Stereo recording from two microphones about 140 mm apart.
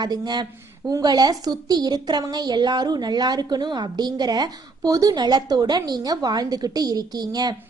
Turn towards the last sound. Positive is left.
turn(degrees=-30)  # may be behind; listen again after turning